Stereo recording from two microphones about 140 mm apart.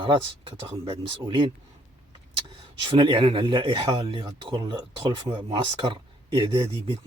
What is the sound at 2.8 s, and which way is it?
Speech, 40° right (ahead or behind).